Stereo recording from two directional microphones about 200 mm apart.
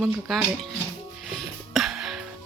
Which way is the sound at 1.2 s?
Centre (ahead or behind).